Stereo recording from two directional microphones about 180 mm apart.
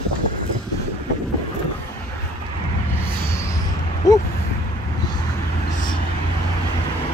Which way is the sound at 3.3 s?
15° left (ahead or behind).